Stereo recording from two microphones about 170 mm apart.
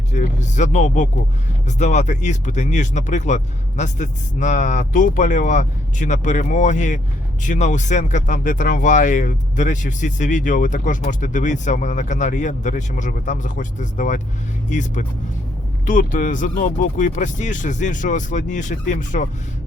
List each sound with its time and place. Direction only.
0.1 s speech: 45° left (ahead or behind)